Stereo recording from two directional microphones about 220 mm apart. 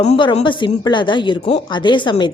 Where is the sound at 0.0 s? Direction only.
25° left (ahead or behind).